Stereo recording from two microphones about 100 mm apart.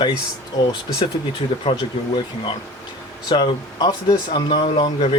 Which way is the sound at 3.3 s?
45° left (ahead or behind).